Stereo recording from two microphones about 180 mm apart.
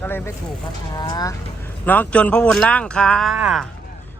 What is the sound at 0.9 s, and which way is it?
Speech, 25° left (ahead or behind).